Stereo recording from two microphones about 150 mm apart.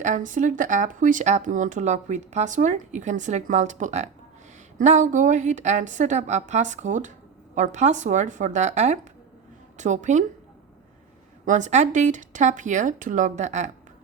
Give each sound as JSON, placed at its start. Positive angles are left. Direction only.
{"t": 0.0, "sound": "a woman's voice", "side_deg": -60}
{"t": 11.4, "sound": "speech", "side_deg": -55}